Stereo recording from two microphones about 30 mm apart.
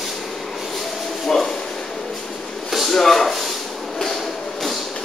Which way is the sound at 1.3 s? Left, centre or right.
Centre.